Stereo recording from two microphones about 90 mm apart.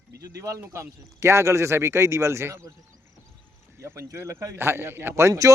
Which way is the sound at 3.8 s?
30° right (ahead or behind).